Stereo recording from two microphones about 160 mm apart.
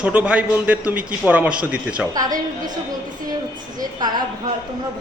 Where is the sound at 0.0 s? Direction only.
10° right (ahead or behind).